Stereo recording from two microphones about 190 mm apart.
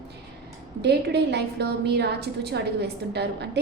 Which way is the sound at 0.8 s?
60° right (ahead or behind).